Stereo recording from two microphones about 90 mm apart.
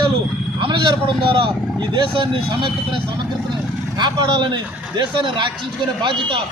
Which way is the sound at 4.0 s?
60° right (ahead or behind).